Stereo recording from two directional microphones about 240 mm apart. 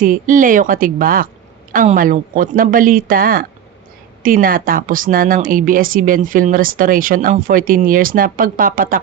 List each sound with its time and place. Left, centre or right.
0.0 s speech: right